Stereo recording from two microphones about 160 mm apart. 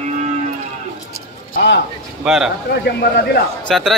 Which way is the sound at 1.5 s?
70° left (ahead or behind).